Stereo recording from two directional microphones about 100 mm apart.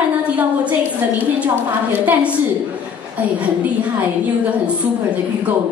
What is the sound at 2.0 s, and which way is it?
Speech, 15° right (ahead or behind).